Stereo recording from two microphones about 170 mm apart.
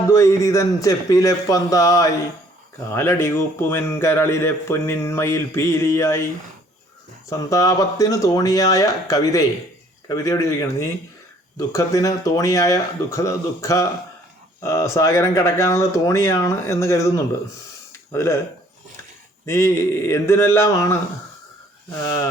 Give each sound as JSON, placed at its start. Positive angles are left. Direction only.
{"t": 0.1, "sound": "a man's voice", "side_deg": 15}
{"t": 7.3, "sound": "a man's voice", "side_deg": 20}
{"t": 18.1, "sound": "a man's voice", "side_deg": 15}
{"t": 19.5, "sound": "a man's voice", "side_deg": 15}